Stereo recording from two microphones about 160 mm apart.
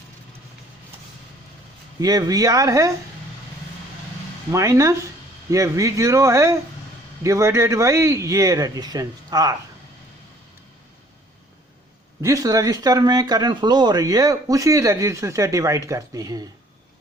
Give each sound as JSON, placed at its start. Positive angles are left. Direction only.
{"t": 2.0, "sound": "speech", "side_deg": -25}
{"t": 4.5, "sound": "speech", "side_deg": -20}
{"t": 12.2, "sound": "speech", "side_deg": -20}